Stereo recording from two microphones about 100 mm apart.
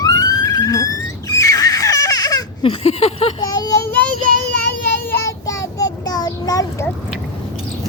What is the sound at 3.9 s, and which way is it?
Child singing, 15° left (ahead or behind).